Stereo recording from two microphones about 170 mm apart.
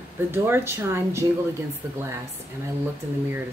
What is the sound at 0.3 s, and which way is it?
Speech, 15° right (ahead or behind).